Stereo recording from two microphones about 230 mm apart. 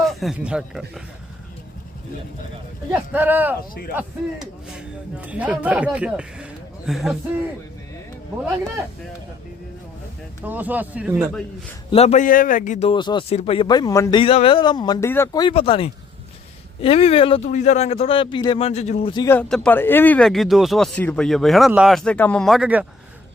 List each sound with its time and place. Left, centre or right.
0.0 s speech: centre
2.9 s speech: centre
10.4 s speech: centre
11.9 s a man's voice: left
19.3 s speech: centre